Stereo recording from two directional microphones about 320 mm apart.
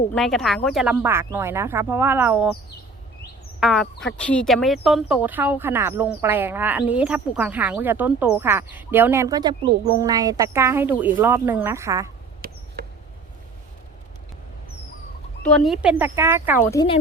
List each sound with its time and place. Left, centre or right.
0.1 s speech: centre
3.6 s speech: centre
12.4 s a sound: right
15.4 s speech: centre
16.7 s speech: centre